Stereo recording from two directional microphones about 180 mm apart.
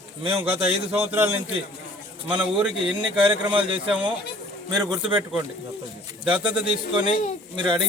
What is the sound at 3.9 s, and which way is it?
Speech, 5° right (ahead or behind).